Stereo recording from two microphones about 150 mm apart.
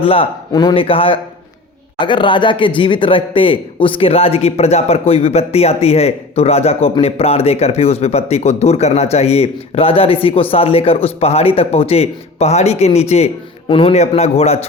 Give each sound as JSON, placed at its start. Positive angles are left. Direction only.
{"t": 0.0, "sound": "speech", "side_deg": 40}